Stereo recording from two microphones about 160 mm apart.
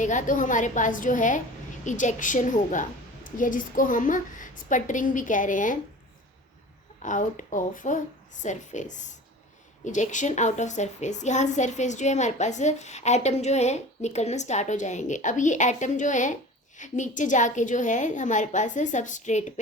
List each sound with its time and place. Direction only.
0.0 s a woman's voice: 50° left (ahead or behind)
7.0 s a woman's voice: 50° left (ahead or behind)